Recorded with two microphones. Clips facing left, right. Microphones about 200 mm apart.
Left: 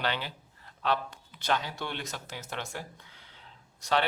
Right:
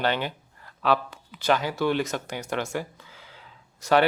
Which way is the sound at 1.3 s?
90° right.